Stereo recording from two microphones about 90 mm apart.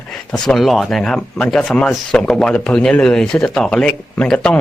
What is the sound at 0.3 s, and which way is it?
Speech, 5° left (ahead or behind).